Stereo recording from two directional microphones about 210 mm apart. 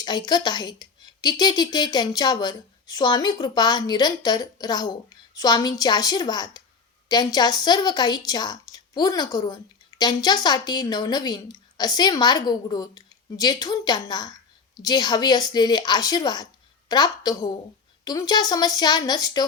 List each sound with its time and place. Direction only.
0.0 s speech: 20° left (ahead or behind)